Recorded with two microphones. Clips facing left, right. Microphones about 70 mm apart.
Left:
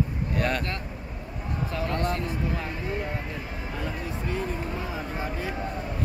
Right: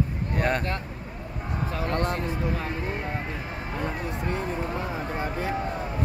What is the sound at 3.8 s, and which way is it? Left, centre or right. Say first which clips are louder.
Speech: right 2 dB; right.